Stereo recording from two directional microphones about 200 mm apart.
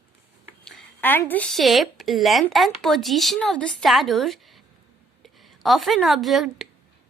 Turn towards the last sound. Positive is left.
turn(degrees=0)  # may be behind; listen again after turning